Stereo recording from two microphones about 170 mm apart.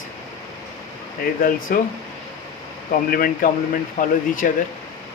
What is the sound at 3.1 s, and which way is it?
Speech, 55° left (ahead or behind).